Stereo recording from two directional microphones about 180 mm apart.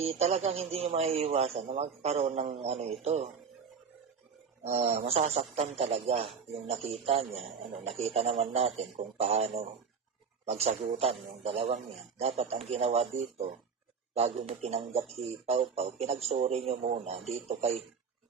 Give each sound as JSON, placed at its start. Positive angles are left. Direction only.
{"t": 0.0, "sound": "a man's voice", "side_deg": -35}
{"t": 4.6, "sound": "a man's voice", "side_deg": -35}